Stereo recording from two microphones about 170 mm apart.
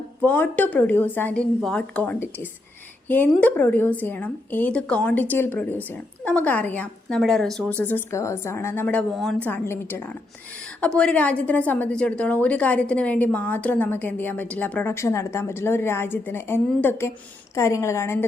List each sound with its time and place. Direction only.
0.2 s a woman's voice: 10° left (ahead or behind)